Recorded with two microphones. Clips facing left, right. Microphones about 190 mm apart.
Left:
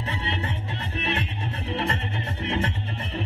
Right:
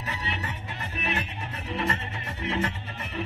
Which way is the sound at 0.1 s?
25° left (ahead or behind).